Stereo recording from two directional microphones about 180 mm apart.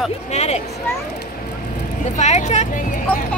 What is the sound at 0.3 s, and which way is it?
Speech, 40° left (ahead or behind).